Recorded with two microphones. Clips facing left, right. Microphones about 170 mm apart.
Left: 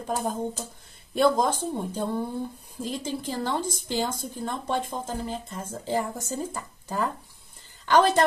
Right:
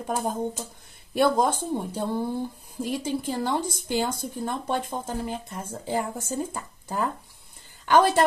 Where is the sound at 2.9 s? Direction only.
10° right (ahead or behind).